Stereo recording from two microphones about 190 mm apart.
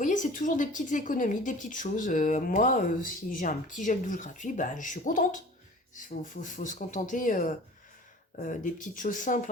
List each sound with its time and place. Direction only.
0.0 s speech: 40° left (ahead or behind)